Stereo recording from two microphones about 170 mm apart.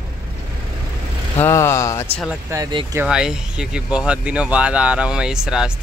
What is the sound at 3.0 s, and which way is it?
Speech, 5° right (ahead or behind).